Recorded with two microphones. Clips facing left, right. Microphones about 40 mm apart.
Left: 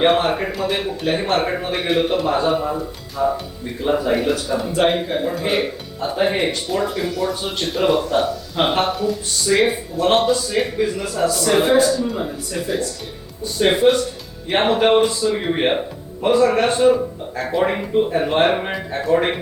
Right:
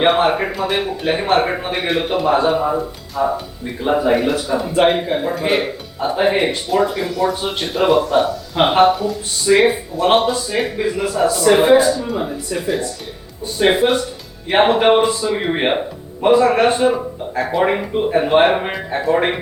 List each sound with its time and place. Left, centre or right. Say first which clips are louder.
0.2 s speech: right 3 dB; centre
1.7 s speech: left 2 dB; centre
8.5 s speech: right 7 dB; centre